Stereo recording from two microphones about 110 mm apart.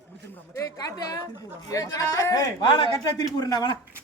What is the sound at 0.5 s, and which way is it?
Speech, 30° left (ahead or behind).